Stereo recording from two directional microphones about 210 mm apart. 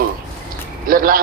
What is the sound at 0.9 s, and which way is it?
Speech, 45° right (ahead or behind).